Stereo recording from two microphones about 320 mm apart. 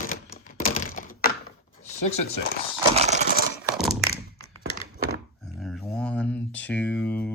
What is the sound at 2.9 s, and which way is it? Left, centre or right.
Coin, right.